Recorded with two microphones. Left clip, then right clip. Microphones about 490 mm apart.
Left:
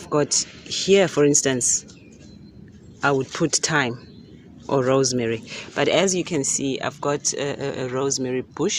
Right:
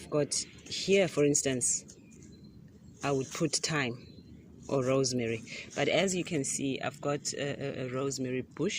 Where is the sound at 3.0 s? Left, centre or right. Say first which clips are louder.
Left 11 dB; left.